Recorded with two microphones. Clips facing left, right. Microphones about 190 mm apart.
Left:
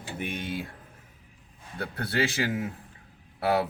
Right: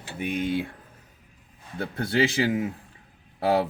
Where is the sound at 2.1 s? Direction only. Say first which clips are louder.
Right 5 dB; 20° right (ahead or behind).